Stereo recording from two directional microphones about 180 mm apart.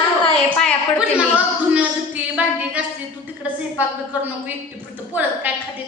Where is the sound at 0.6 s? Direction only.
5° left (ahead or behind).